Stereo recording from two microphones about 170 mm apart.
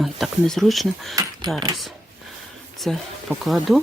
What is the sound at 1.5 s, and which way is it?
Speech, 25° right (ahead or behind).